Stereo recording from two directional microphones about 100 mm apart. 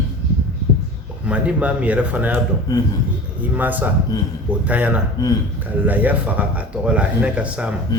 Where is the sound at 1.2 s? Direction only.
15° right (ahead or behind).